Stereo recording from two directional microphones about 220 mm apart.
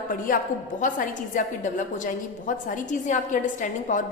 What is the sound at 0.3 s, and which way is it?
A woman's voice, 40° left (ahead or behind).